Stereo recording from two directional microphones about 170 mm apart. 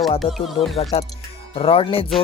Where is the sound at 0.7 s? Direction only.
40° left (ahead or behind).